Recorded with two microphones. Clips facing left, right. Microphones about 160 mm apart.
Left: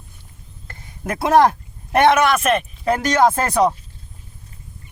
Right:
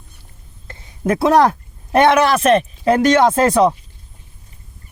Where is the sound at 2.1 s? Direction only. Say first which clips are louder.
Right 4 dB; 35° right (ahead or behind).